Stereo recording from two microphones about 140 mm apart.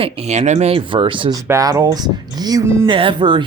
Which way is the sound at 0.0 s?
50° right (ahead or behind).